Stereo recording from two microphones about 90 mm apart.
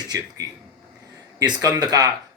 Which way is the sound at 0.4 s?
40° right (ahead or behind).